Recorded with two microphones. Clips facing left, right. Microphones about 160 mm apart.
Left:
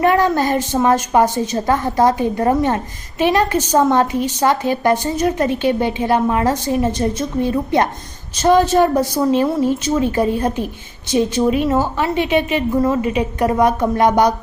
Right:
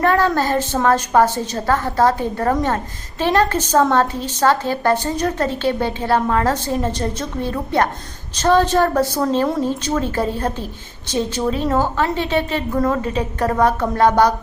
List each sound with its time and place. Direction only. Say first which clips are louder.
0.0 s a woman's voice: left 2 dB; 15° left (ahead or behind)